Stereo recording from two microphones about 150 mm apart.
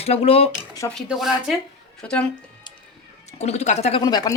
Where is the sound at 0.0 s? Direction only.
40° left (ahead or behind).